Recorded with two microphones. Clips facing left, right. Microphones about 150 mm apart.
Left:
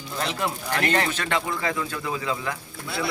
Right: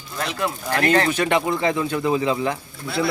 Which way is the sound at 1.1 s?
15° right (ahead or behind).